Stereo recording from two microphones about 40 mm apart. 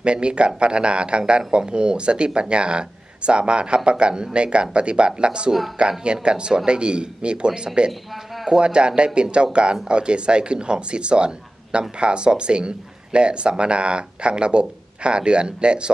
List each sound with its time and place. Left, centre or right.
0.0 s speech: right